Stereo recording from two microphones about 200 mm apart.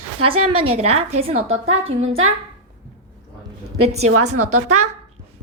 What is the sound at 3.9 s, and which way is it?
Speech, 90° right.